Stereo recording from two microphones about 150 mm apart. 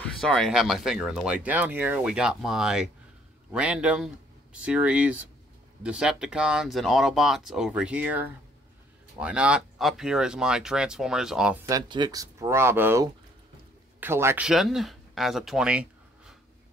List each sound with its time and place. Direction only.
0.0 s speech: 5° left (ahead or behind)
11.6 s speech: 25° right (ahead or behind); by 16.3 s 5° right (ahead or behind)